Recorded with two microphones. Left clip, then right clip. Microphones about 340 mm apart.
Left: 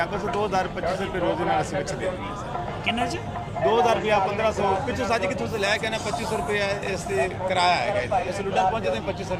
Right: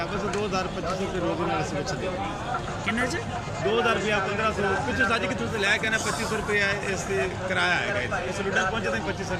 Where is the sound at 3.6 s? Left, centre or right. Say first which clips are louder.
Left 4 dB; centre.